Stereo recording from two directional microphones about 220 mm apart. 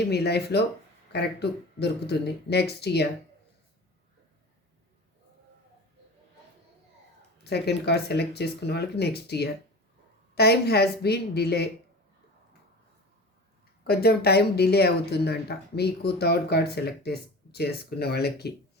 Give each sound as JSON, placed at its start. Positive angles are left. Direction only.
{"t": 0.1, "sound": "speech", "side_deg": 50}
{"t": 7.4, "sound": "speech", "side_deg": 50}
{"t": 13.8, "sound": "speech", "side_deg": 45}